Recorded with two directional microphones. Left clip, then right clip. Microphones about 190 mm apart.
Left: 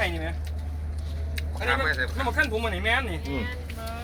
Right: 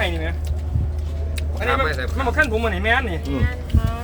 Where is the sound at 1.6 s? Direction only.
40° right (ahead or behind).